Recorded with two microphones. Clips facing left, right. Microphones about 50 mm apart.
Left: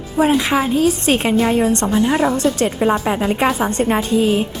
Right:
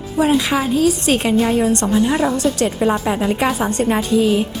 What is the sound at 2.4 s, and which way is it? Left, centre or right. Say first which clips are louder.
Speech: left 1 dB; left.